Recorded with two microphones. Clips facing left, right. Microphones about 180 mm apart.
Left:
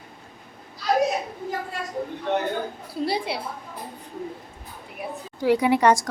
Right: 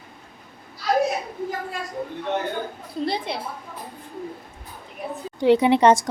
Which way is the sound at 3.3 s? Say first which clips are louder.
Even; 5° left (ahead or behind).